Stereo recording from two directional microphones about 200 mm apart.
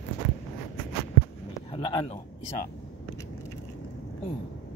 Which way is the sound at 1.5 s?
25° left (ahead or behind).